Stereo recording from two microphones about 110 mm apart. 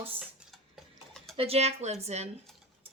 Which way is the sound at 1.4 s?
70° right (ahead or behind).